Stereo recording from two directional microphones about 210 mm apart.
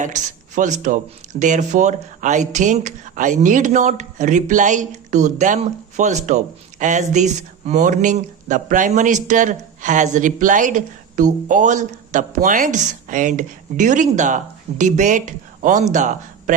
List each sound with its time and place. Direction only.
0.0 s speech: 35° right (ahead or behind)